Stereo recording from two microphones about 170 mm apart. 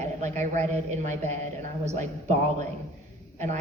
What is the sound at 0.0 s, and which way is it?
A man's voice, 45° right (ahead or behind).